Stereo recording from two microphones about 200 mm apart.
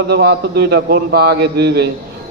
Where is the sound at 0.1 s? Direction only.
55° right (ahead or behind).